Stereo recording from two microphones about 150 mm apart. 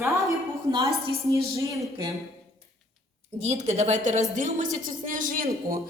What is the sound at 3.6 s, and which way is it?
A woman's voice, 45° right (ahead or behind).